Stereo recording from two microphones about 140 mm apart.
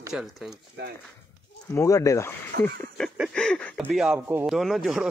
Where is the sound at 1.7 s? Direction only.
20° left (ahead or behind).